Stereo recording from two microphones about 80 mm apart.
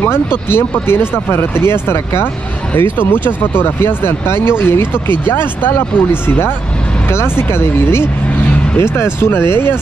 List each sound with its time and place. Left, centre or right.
0.5 s speech: left